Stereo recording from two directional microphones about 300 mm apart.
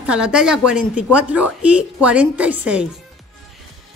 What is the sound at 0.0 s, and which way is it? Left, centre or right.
A woman's voice, centre.